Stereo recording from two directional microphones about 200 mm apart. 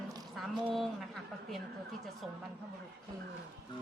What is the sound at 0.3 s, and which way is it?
A woman's voice, centre (ahead or behind).